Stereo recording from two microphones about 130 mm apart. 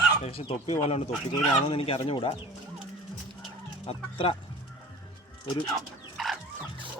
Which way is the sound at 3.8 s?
45° left (ahead or behind).